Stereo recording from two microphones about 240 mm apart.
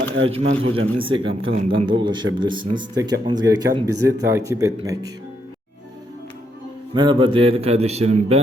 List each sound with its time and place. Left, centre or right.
0.3 s a man's voice: right
6.9 s a man's voice: centre